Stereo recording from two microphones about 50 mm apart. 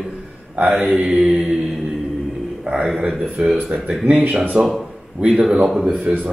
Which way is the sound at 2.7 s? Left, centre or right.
Right.